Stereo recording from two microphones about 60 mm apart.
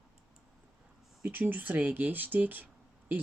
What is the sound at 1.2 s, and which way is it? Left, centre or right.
Speech, right.